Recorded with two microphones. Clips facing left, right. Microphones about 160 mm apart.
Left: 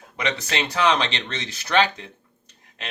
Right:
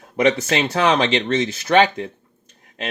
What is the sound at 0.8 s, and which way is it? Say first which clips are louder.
Speech: right 2 dB; 50° right (ahead or behind).